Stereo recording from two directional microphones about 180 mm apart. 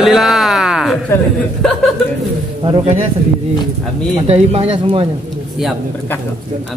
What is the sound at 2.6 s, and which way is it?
Speech, 30° right (ahead or behind).